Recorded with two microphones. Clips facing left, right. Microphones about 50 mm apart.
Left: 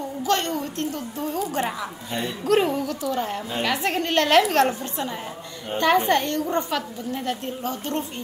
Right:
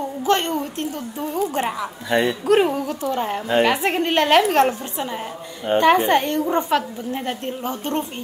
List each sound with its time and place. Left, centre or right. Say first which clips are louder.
0.2 s a woman's voice: right 3 dB; right
2.0 s speech: right 11 dB; right
2.4 s speech: right 3 dB; centre
3.0 s a woman's voice: right 3 dB; right
5.7 s a woman's voice: right 8 dB; right
6.0 s a woman's voice: right 3 dB; centre
7.2 s a woman's voice: right 1 dB; right